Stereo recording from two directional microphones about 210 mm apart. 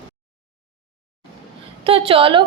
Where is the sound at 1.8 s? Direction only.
25° right (ahead or behind).